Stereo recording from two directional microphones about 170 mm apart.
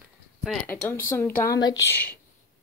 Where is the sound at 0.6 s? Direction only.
10° left (ahead or behind).